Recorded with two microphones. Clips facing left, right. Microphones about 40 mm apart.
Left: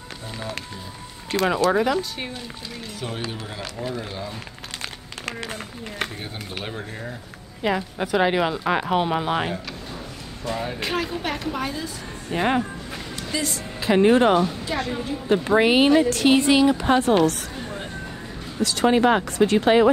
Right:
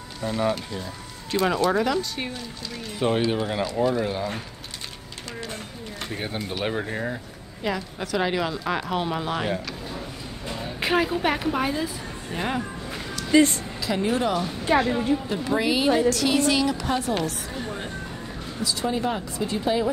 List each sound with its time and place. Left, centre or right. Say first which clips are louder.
0.2 s speech: right 10 dB; right
1.3 s speech: left 2 dB; centre
3.0 s speech: right 10 dB; right
5.2 s speech: left 3 dB; left
6.6 s speech: right 7 dB; centre
7.6 s a woman's voice: left 4 dB; centre
10.8 s a woman's voice: right 3 dB; centre
12.3 s a woman's voice: left 6 dB; left
13.3 s a woman's voice: right 10 dB; right
13.7 s speech: left 9 dB; left
14.8 s a woman's voice: right 4 dB; centre
15.2 s speech: left 6 dB; left
18.6 s speech: left 7 dB; left